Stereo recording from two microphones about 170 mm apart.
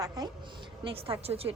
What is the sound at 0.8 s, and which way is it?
Speech, 30° right (ahead or behind).